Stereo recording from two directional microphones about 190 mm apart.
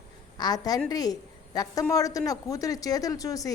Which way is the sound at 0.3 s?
20° left (ahead or behind).